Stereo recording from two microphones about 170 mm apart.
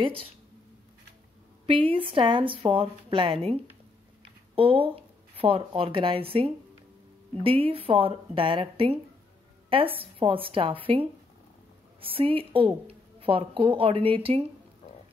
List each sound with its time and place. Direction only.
0.0 s a woman's voice: 30° right (ahead or behind)
1.7 s a woman's voice: 30° right (ahead or behind)
4.2 s a sound: 30° right (ahead or behind)
5.8 s a woman's voice: 30° right (ahead or behind)